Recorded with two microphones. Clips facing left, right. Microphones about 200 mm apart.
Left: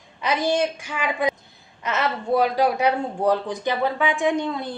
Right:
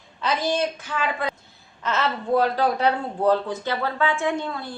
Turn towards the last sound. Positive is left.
turn(degrees=20)  # may be behind; listen again after turning